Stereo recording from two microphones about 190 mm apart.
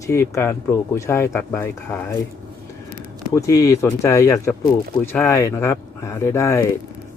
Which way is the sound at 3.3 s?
15° left (ahead or behind).